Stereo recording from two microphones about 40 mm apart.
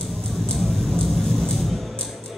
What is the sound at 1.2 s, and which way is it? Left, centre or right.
Music, centre.